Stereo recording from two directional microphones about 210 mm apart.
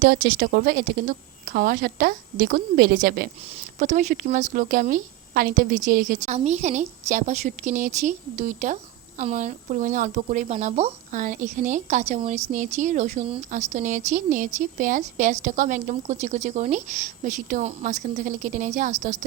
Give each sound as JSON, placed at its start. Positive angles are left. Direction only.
{"t": 0.0, "sound": "a woman's voice", "side_deg": -45}